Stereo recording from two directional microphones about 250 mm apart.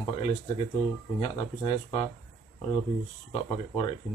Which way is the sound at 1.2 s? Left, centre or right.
Left.